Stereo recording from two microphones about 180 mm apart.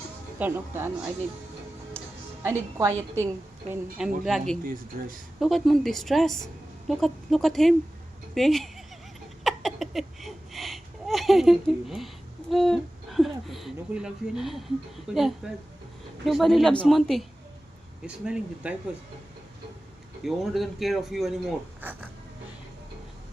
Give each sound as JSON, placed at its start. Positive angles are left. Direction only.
{"t": 0.3, "sound": "a woman's voice", "side_deg": -10}
{"t": 2.4, "sound": "a woman's voice", "side_deg": -15}
{"t": 4.9, "sound": "speech", "side_deg": -55}
{"t": 5.4, "sound": "speech", "side_deg": 0}
{"t": 9.4, "sound": "a sound", "side_deg": 0}
{"t": 15.1, "sound": "speech", "side_deg": -5}
{"t": 20.2, "sound": "speech", "side_deg": 0}